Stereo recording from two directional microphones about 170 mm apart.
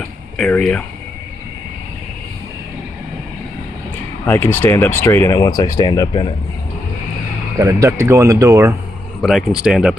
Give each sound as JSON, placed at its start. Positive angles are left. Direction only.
{"t": 0.4, "sound": "speech", "side_deg": 5}
{"t": 4.3, "sound": "speech", "side_deg": 15}
{"t": 7.6, "sound": "speech", "side_deg": -20}
{"t": 9.2, "sound": "speech", "side_deg": 0}